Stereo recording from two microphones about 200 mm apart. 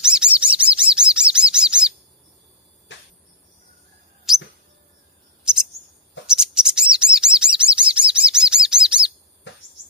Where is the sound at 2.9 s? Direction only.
65° left (ahead or behind).